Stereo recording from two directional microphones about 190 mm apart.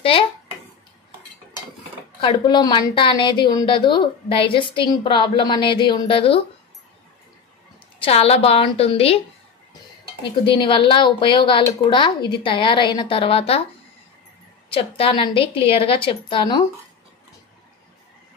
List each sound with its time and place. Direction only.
0.0 s a child's voice: 30° left (ahead or behind)
2.1 s a woman's voice: 25° left (ahead or behind)
8.0 s a woman's voice: 30° left (ahead or behind)
10.4 s a woman's voice: 25° left (ahead or behind)
14.7 s a woman's voice: 30° left (ahead or behind)